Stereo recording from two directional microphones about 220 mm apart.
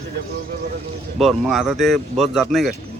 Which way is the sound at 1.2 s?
Centre (ahead or behind).